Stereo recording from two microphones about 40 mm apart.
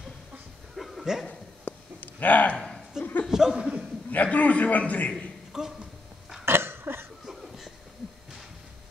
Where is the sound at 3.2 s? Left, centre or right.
Centre.